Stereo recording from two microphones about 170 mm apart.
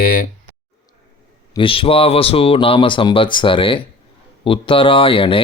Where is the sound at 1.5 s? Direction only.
30° left (ahead or behind).